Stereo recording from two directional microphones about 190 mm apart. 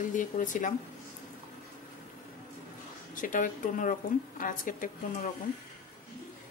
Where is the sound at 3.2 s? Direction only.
45° left (ahead or behind).